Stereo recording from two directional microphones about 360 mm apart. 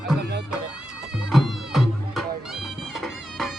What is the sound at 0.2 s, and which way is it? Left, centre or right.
Music, right.